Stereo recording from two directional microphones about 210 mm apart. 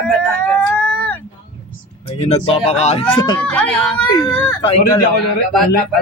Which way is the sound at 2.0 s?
30° left (ahead or behind).